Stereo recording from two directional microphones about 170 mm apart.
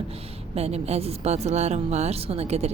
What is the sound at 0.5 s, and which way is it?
A woman's voice, 40° right (ahead or behind).